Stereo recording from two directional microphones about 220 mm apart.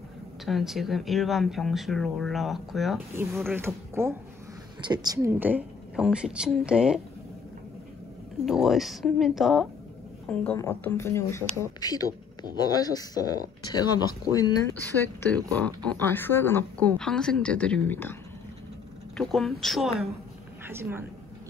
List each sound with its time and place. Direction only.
0.5 s speech: centre (ahead or behind)
3.5 s speech: 10° right (ahead or behind)
8.5 s speech: centre (ahead or behind)
19.1 s speech: centre (ahead or behind)
20.6 s speech: 10° right (ahead or behind)